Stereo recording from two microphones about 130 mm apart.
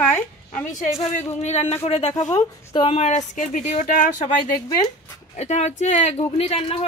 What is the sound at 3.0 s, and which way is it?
Speech, 65° left (ahead or behind).